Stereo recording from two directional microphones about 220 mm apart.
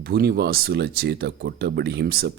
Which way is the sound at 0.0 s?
45° right (ahead or behind).